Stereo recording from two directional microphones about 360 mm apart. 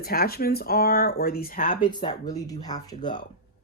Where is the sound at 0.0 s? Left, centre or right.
Left.